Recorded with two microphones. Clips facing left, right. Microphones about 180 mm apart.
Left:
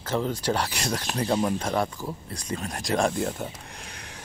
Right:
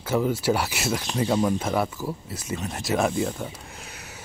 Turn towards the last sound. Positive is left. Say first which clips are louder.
# right 1 dB
turn(degrees=-5)  # may be behind; listen again after turning